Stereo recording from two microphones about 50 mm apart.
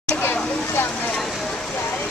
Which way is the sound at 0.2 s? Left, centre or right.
Left.